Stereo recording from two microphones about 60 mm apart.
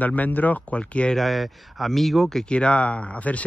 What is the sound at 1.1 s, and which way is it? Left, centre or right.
Speech, centre.